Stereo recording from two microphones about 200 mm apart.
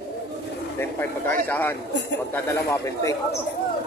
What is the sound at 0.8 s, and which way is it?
Speech, 10° left (ahead or behind).